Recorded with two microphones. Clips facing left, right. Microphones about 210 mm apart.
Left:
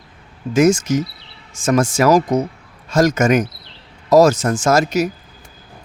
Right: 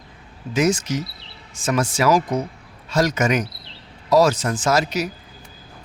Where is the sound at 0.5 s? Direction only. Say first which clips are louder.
Left 6 dB; 45° left (ahead or behind).